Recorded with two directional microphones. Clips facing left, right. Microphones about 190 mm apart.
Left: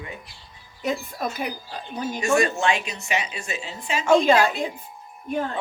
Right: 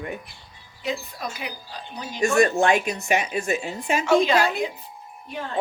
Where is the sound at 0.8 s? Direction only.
50° left (ahead or behind).